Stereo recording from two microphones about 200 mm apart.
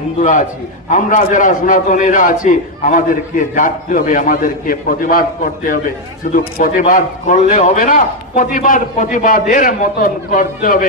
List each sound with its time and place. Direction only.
0.2 s a man's voice: 40° left (ahead or behind)